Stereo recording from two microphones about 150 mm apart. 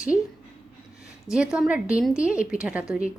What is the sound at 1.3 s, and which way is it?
A woman's voice, 5° right (ahead or behind).